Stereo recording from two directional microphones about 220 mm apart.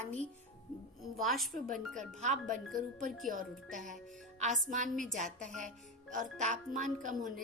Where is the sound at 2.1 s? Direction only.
35° right (ahead or behind).